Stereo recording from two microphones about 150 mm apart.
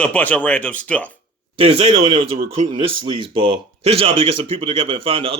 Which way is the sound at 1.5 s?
40° right (ahead or behind).